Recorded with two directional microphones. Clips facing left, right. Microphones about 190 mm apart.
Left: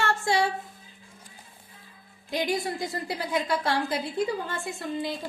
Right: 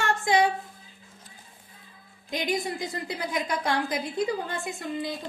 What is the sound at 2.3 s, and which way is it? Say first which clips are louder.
A woman's voice: left 1 dB; 15° right (ahead or behind).